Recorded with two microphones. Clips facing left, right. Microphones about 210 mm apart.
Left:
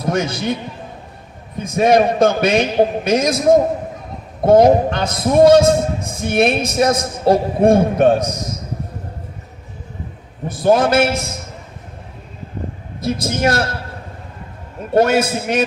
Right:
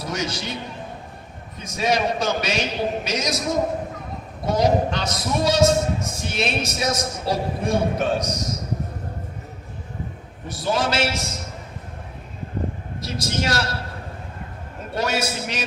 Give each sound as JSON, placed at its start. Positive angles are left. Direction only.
{"t": 0.0, "sound": "a man's voice", "side_deg": 55}
{"t": 1.5, "sound": "a man's voice", "side_deg": 55}
{"t": 4.4, "sound": "a man's voice", "side_deg": 55}
{"t": 10.5, "sound": "a man's voice", "side_deg": 55}
{"t": 13.0, "sound": "a man's voice", "side_deg": 55}
{"t": 14.9, "sound": "a man's voice", "side_deg": 55}